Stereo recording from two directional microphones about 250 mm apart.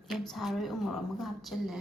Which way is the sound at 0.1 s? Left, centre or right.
Centre.